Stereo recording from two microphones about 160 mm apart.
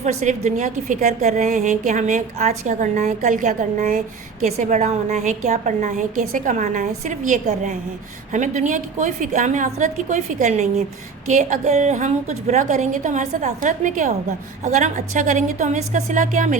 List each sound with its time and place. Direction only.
0.0 s a woman's voice: 45° right (ahead or behind)